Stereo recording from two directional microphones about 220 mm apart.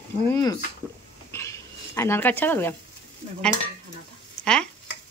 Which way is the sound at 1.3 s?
10° left (ahead or behind).